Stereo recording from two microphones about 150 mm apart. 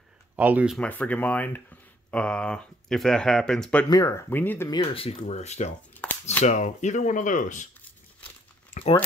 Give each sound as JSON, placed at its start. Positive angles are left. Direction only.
{"t": 0.4, "sound": "speech", "side_deg": -10}
{"t": 0.7, "sound": "speech", "side_deg": 10}
{"t": 3.9, "sound": "speech", "side_deg": 20}
{"t": 4.6, "sound": "speech", "side_deg": 35}
{"t": 5.2, "sound": "speech", "side_deg": 50}
{"t": 8.7, "sound": "a sound", "side_deg": 40}